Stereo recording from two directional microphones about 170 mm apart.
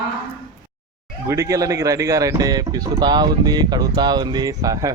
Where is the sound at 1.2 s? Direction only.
20° right (ahead or behind).